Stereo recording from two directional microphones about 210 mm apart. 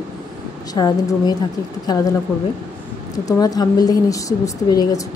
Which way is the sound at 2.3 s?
5° left (ahead or behind).